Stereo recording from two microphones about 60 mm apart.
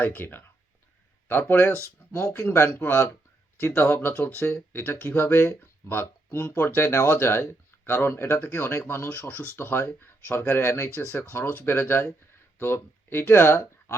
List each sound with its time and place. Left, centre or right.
0.0 s speech: left
9.0 s speech: left
11.4 s speech: left